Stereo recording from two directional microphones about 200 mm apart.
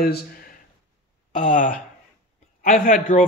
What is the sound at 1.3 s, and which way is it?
A man's voice, 40° left (ahead or behind).